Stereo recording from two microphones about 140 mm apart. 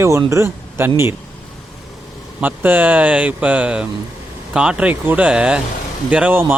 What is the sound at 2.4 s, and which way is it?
Speech, 10° right (ahead or behind).